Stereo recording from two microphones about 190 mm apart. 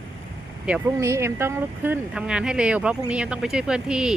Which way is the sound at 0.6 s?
5° right (ahead or behind).